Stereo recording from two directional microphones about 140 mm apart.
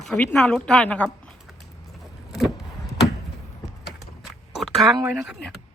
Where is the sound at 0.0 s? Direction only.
Centre (ahead or behind).